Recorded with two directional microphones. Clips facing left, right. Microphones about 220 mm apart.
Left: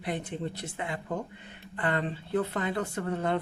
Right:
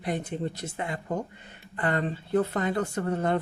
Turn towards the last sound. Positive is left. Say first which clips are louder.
# right 3 dB
turn(degrees=-45)  # may be behind; listen again after turning